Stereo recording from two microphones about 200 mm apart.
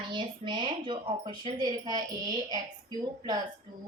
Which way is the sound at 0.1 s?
25° right (ahead or behind).